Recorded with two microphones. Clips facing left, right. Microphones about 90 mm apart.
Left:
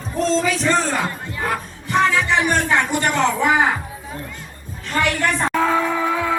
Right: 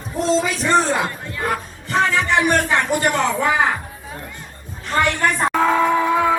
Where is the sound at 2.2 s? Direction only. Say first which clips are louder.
Right 1 dB; centre (ahead or behind).